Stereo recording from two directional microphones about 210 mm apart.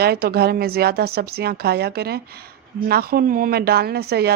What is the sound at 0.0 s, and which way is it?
Speech, 50° right (ahead or behind).